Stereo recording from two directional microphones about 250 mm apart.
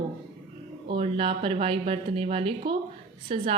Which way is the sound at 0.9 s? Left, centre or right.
Right.